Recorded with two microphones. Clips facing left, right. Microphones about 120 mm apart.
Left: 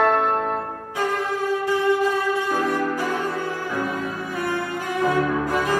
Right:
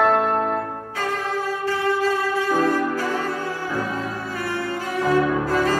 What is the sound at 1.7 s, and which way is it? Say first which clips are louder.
Music: left 1 dB; 15° left (ahead or behind).